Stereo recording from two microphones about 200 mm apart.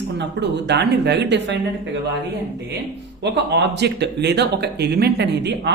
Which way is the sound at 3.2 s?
60° right (ahead or behind).